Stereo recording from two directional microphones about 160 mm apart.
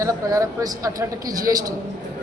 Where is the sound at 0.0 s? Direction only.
20° right (ahead or behind).